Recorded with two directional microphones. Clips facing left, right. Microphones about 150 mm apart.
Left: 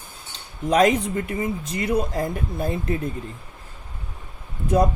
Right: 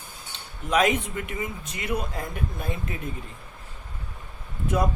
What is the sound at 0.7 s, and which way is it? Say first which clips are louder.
Speech: left 5 dB; 35° left (ahead or behind).